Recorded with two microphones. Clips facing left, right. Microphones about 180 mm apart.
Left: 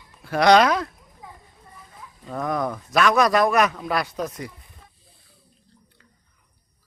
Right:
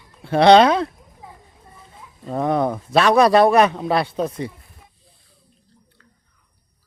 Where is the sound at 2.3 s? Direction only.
30° right (ahead or behind).